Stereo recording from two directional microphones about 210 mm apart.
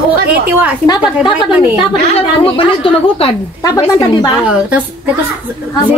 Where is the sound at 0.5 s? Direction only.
10° right (ahead or behind).